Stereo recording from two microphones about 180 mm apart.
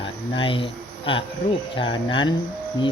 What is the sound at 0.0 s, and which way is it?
Speech, 30° left (ahead or behind).